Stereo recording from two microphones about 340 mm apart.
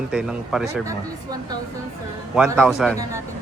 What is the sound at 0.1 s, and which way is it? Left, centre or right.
Speech, centre.